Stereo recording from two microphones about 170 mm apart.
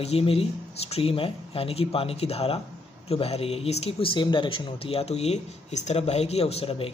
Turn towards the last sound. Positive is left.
turn(degrees=35)  # may be behind; listen again after turning